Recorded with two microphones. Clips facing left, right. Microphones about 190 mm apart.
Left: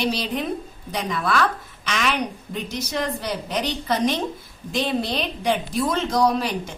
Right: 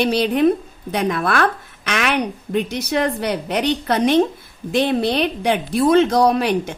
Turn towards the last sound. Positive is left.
turn(degrees=-65)  # may be behind; listen again after turning